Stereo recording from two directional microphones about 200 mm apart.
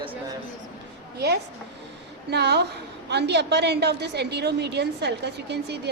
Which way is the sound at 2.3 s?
55° right (ahead or behind).